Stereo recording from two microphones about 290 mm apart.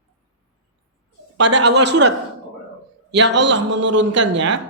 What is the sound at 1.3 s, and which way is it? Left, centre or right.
Speech, right.